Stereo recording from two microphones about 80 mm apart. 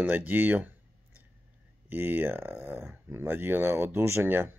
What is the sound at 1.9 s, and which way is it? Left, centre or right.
Speech, right.